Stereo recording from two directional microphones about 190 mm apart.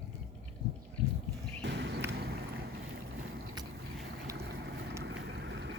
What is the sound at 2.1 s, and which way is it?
Boat, 55° right (ahead or behind).